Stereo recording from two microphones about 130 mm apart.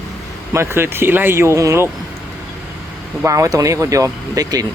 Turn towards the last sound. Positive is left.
turn(degrees=-30)  # may be behind; listen again after turning